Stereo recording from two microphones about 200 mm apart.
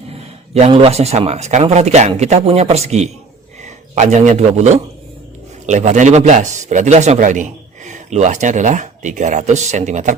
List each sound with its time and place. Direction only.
0.1 s a man's voice: 30° right (ahead or behind)